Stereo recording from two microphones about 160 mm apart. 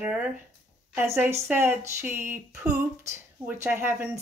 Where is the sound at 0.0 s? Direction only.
10° right (ahead or behind).